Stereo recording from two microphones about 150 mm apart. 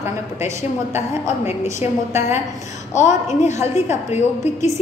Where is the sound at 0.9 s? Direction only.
45° left (ahead or behind).